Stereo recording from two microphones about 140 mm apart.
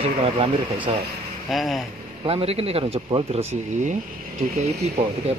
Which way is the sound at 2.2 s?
45° right (ahead or behind).